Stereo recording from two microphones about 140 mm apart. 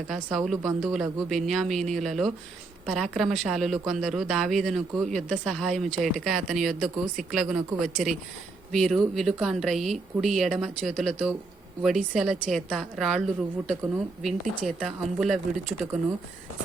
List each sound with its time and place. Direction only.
0.1 s speech: centre (ahead or behind)